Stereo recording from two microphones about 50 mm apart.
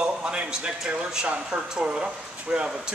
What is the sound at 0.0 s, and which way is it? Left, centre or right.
Speech, right.